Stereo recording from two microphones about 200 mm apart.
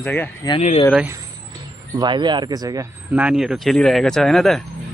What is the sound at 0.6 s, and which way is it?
Speech, 35° left (ahead or behind).